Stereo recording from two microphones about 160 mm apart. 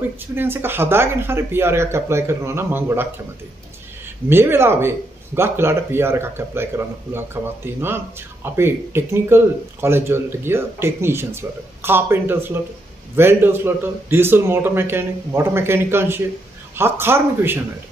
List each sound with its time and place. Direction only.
0.3 s speech: 15° right (ahead or behind)
4.3 s speech: 15° right (ahead or behind)